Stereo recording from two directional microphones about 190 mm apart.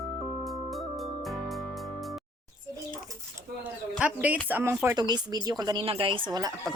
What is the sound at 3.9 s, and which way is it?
Speech, 5° right (ahead or behind).